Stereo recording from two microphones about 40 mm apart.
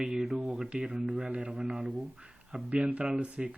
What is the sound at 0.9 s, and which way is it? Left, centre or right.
Speech, right.